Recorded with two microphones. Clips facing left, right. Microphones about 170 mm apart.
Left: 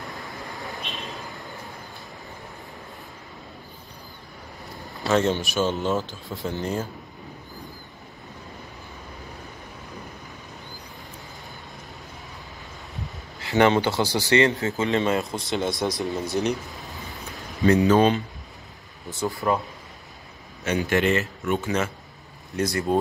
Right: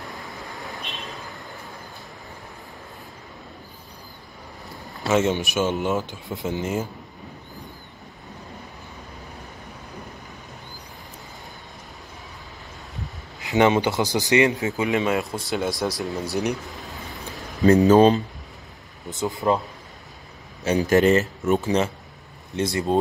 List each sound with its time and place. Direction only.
0.1 s vehicle: centre (ahead or behind)
5.0 s speech: 10° right (ahead or behind)
13.4 s speech: 20° right (ahead or behind)
15.0 s speech: 5° right (ahead or behind)
17.6 s speech: 35° right (ahead or behind)
19.0 s speech: 20° right (ahead or behind)
20.6 s speech: 35° right (ahead or behind)